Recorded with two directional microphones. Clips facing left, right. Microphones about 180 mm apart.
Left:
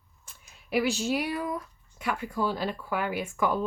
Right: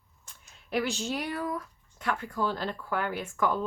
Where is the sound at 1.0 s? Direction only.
10° left (ahead or behind).